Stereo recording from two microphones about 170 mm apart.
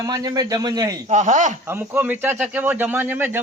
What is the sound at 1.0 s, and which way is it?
Speech, 45° right (ahead or behind).